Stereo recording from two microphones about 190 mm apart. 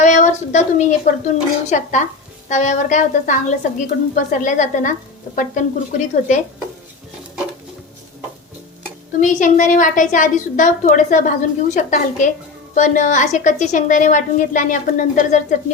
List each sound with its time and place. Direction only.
0.0 s a woman's voice: 40° left (ahead or behind)
9.2 s a woman's voice: 40° left (ahead or behind)